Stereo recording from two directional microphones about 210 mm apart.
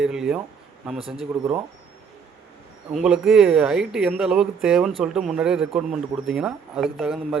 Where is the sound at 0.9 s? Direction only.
25° right (ahead or behind).